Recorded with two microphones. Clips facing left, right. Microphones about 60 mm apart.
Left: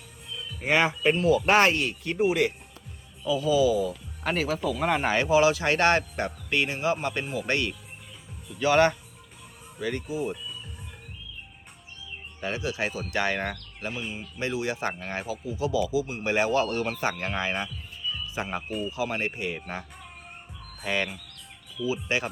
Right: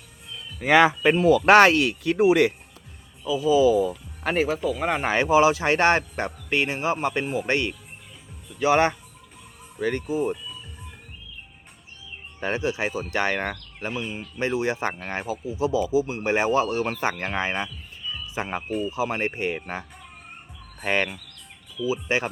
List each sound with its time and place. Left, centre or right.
0.7 s speech: right
3.2 s a man's voice: centre
3.5 s speech: right
4.6 s a man's voice: centre
9.8 s speech: right
12.4 s a man's voice: right
20.8 s speech: right
21.8 s speech: right